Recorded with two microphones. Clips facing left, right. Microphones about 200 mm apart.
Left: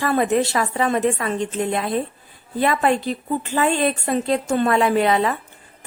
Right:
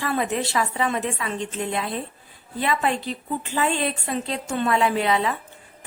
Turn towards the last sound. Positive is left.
turn(degrees=50)  # may be behind; listen again after turning